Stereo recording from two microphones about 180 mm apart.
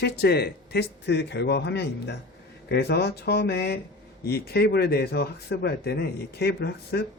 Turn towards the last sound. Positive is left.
turn(degrees=65)  # may be behind; listen again after turning